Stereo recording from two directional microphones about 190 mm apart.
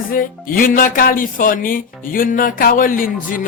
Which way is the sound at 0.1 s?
45° left (ahead or behind).